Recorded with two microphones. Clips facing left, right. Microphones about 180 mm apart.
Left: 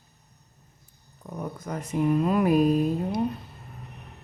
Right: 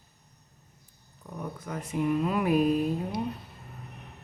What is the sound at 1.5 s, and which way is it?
Speech, 40° left (ahead or behind).